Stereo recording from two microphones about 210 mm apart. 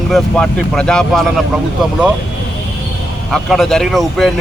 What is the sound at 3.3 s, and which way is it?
Speech, centre (ahead or behind).